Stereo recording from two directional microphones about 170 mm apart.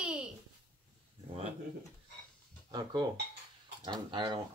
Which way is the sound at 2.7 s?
25° right (ahead or behind).